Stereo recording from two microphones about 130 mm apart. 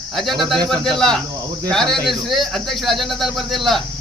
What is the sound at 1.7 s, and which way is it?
Speech, 5° left (ahead or behind).